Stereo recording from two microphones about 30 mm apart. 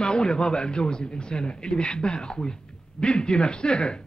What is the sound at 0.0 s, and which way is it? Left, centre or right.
Speech, left.